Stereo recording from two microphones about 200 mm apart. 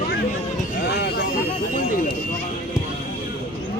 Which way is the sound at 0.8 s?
55° left (ahead or behind).